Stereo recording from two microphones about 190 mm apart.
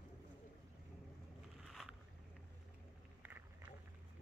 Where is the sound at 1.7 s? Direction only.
Centre (ahead or behind).